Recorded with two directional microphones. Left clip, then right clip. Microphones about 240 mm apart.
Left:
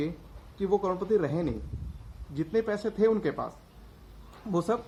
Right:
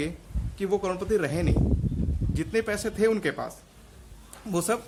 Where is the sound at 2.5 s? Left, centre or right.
Centre.